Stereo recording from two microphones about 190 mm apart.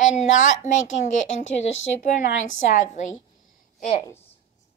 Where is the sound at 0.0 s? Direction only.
40° left (ahead or behind).